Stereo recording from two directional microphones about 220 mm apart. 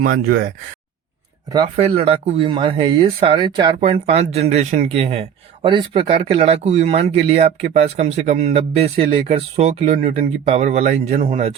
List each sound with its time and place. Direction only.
0.0 s speech: 40° right (ahead or behind)
1.5 s speech: 20° right (ahead or behind)